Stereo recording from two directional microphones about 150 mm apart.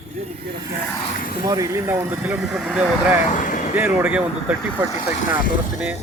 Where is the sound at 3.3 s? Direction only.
60° left (ahead or behind).